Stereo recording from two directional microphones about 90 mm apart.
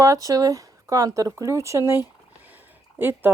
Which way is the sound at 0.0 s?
40° right (ahead or behind).